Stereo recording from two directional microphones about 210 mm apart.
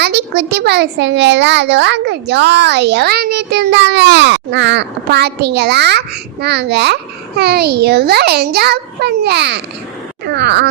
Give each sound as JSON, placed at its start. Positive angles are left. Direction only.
{"t": 0.0, "sound": "a child's voice", "side_deg": -50}